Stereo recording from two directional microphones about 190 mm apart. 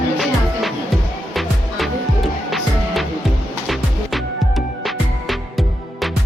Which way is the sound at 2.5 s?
Centre (ahead or behind).